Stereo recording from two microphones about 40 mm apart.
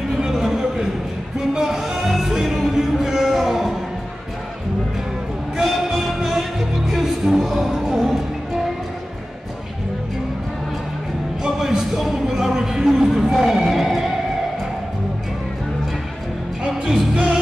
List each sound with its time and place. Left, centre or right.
0.2 s a sound: centre
1.5 s music: centre
5.6 s music: centre
11.4 s a sound: centre
13.6 s music: centre
17.1 s music: right